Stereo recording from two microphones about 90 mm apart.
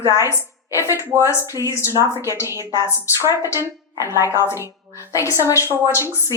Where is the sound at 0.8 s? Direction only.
30° right (ahead or behind).